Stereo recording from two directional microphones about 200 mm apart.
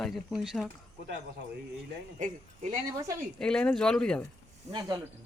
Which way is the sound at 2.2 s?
40° right (ahead or behind).